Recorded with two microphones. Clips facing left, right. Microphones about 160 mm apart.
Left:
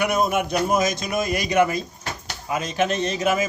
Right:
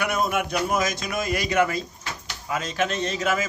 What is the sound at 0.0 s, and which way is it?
A man's voice, 20° left (ahead or behind).